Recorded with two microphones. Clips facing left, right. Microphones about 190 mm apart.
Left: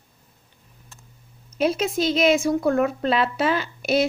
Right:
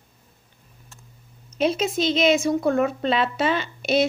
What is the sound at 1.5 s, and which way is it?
A woman's voice, 5° left (ahead or behind).